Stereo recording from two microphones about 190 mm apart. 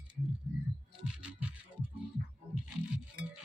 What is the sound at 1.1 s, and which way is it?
Music, 5° right (ahead or behind).